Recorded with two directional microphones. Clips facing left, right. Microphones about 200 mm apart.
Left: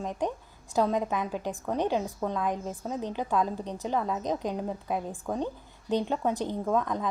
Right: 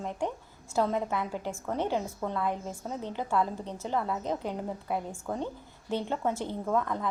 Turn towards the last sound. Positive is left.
turn(degrees=15)  # may be behind; listen again after turning